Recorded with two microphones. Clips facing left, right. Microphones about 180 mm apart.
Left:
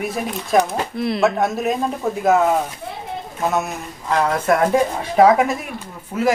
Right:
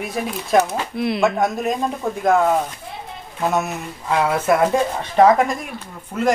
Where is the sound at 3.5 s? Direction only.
5° right (ahead or behind).